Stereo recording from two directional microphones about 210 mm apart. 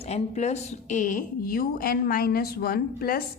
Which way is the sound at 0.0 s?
30° left (ahead or behind).